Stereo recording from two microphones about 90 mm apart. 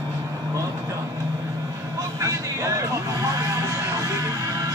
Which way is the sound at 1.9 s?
40° right (ahead or behind).